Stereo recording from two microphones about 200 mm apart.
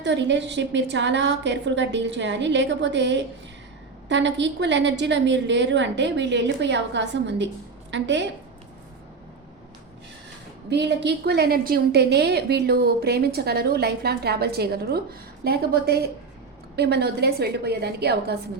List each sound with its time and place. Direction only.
0.0 s a woman's voice: 60° right (ahead or behind)
10.7 s a woman's voice: 60° right (ahead or behind)